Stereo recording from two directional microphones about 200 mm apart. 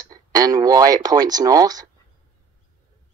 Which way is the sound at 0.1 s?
20° right (ahead or behind).